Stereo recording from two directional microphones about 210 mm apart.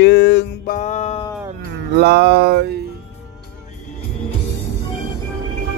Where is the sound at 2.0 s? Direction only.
50° right (ahead or behind).